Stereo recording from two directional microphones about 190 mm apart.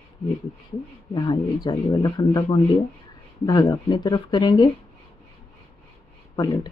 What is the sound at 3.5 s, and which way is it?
Speech, 25° left (ahead or behind).